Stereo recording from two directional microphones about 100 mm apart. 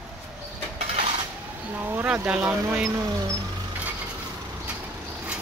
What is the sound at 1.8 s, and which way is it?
Speech, 20° right (ahead or behind).